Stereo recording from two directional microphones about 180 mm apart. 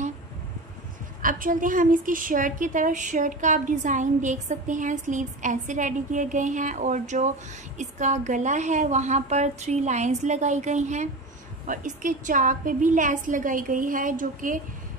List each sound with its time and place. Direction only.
1.2 s a woman's voice: 50° right (ahead or behind)